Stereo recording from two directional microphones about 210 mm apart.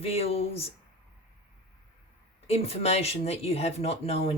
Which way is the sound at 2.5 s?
30° left (ahead or behind).